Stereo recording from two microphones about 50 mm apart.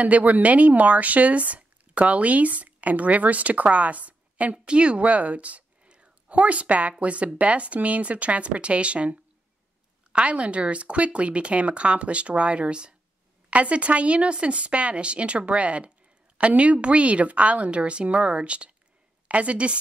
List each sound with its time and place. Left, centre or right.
0.0 s a woman's voice: right